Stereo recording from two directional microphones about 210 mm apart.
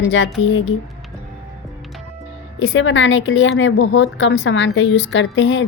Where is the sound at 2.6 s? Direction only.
65° left (ahead or behind).